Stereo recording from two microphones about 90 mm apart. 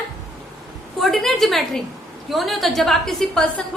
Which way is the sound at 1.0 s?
Centre (ahead or behind).